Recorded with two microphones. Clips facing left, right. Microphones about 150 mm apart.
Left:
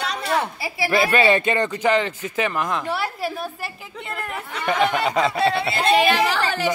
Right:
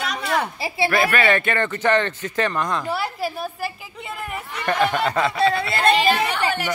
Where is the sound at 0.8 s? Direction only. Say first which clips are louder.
Left 2 dB; 25° left (ahead or behind); by 5.1 s centre (ahead or behind).